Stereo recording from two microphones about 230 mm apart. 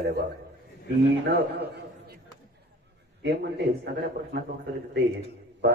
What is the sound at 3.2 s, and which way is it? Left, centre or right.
A man's voice, right.